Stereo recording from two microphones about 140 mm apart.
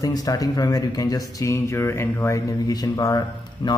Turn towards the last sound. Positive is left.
turn(degrees=25)  # may be behind; listen again after turning